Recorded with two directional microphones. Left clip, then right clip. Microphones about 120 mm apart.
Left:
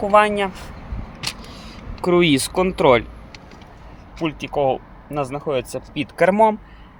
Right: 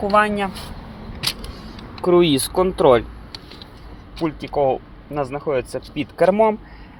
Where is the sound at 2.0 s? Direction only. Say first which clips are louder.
Right 1 dB; 30° left (ahead or behind).